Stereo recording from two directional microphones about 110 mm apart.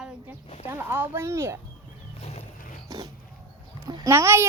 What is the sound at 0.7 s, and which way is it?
Speech, 20° right (ahead or behind).